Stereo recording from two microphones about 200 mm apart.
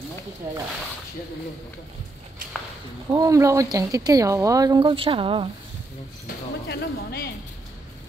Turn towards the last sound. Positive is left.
turn(degrees=50)  # may be behind; listen again after turning